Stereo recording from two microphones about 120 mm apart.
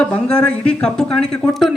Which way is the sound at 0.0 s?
10° left (ahead or behind).